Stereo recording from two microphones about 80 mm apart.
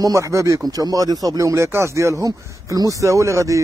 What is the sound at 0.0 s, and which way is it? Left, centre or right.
Speech, right.